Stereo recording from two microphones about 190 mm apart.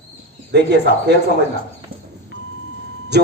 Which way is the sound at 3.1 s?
60° right (ahead or behind).